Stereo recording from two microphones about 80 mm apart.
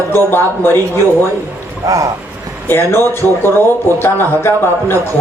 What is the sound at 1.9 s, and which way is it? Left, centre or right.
Speech, right.